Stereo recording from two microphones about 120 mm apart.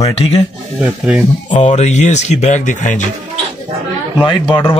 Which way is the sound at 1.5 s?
75° left (ahead or behind).